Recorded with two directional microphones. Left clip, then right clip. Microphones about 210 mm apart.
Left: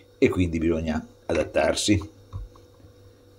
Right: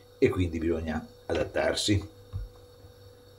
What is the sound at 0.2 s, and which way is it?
Speech, 25° left (ahead or behind).